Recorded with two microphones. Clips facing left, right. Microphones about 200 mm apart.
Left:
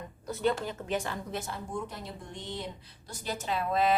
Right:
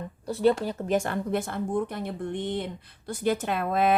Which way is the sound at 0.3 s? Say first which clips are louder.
Right 7 dB; 30° right (ahead or behind).